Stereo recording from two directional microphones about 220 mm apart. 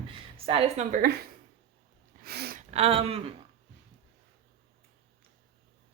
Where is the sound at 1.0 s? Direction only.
45° right (ahead or behind).